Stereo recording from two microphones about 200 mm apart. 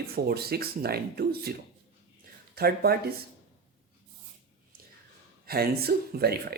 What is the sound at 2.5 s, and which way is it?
Speech, 50° right (ahead or behind).